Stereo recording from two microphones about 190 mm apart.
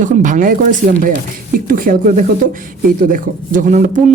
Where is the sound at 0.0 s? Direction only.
40° right (ahead or behind).